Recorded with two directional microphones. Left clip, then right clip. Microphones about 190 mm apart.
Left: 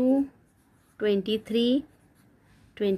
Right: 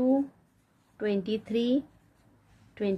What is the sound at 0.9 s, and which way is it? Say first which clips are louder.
A woman's voice: left 4 dB; 25° left (ahead or behind).